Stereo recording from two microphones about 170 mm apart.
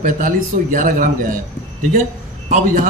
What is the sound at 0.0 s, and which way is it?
A man's voice, 50° right (ahead or behind).